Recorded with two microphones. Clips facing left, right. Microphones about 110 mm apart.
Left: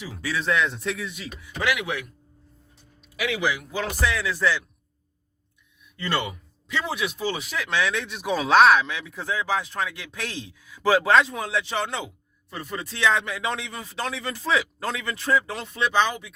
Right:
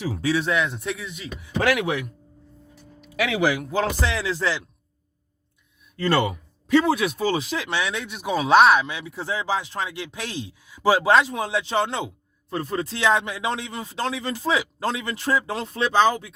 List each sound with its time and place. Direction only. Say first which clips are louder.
0.0 s speech: right 8 dB; 35° right (ahead or behind)
0.3 s speech: right 1 dB; 20° right (ahead or behind)
1.5 s speech: right 5 dB; 50° right (ahead or behind)
3.5 s speech: right 4 dB; 50° right (ahead or behind)
3.8 s speech: right 2 dB; 30° right (ahead or behind)
6.0 s speech: right 6 dB; 45° right (ahead or behind)
8.1 s speech: right 3 dB; 5° right (ahead or behind)
8.9 s speech: right 1 dB; 20° right (ahead or behind)
15.5 s speech: right 2 dB; 40° right (ahead or behind)